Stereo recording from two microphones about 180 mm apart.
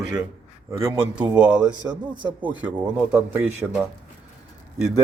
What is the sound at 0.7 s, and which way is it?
Speech, 15° right (ahead or behind).